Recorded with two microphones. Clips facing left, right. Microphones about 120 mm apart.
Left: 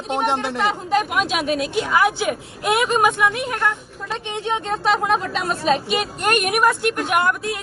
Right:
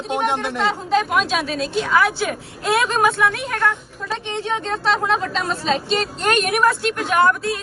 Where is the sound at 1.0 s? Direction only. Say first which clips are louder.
Right 1 dB; 15° left (ahead or behind).